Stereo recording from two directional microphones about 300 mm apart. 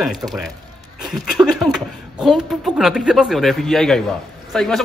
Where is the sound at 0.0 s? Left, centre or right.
Centre.